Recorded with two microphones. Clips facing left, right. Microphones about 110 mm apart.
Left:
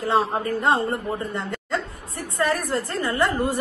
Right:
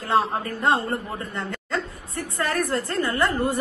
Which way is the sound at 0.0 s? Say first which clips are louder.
Left 1 dB; 20° left (ahead or behind).